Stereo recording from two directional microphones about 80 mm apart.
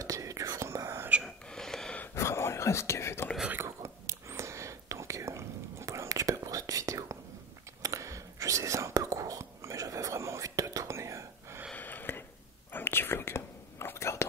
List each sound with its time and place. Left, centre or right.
0.0 s whispering: right
1.2 s whispering: centre
2.1 s whispering: left
3.6 s whispering: right
11.7 s a sound: left
12.7 s whispering: left